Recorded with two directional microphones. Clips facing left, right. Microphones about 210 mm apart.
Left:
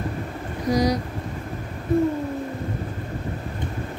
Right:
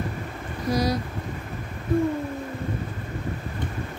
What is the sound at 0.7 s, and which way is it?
Speech, 20° left (ahead or behind).